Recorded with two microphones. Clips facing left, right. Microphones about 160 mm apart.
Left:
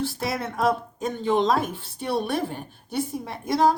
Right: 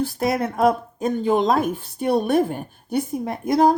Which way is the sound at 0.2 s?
50° right (ahead or behind).